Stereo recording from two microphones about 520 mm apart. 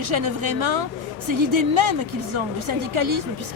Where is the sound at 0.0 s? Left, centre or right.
Right.